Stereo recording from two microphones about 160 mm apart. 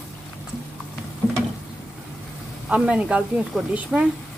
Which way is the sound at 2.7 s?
5° right (ahead or behind).